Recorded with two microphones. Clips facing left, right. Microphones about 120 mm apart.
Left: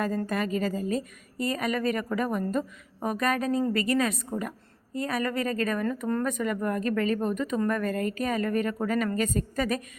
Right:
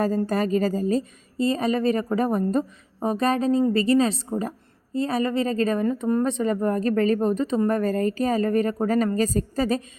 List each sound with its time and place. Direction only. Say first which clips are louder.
0.3 s a woman's voice: right 6 dB; 35° right (ahead or behind)